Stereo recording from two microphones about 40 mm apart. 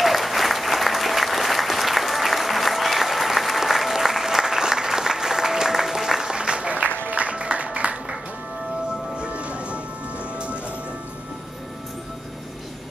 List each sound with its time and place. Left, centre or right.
0.0 s applause: centre
6.3 s applause: right
7.2 s music: right